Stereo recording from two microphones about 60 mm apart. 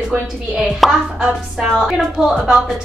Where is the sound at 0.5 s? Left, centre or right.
Centre.